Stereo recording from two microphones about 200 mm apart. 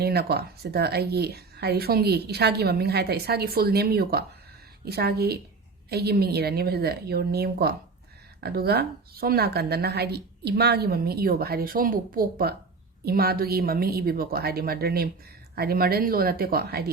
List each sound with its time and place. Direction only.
0.0 s speech: 50° right (ahead or behind)